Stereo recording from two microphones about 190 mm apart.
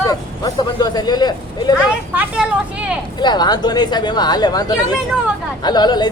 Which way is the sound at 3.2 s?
20° left (ahead or behind).